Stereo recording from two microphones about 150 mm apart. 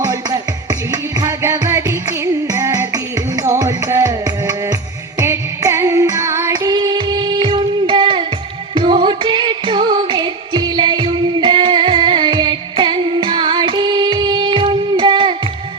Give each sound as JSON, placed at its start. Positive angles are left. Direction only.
{"t": 0.0, "sound": "music", "side_deg": -25}